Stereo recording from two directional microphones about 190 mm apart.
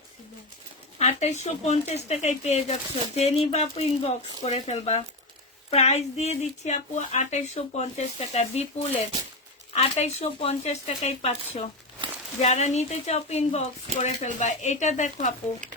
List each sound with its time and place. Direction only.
0.9 s speech: 35° left (ahead or behind)